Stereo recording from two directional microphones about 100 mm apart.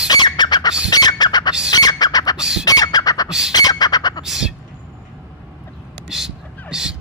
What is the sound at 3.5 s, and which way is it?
Bird, 40° left (ahead or behind).